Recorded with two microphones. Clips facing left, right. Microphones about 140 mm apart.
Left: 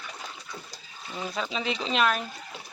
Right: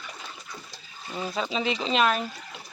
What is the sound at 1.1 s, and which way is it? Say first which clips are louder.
Speech: right 3 dB; 5° right (ahead or behind).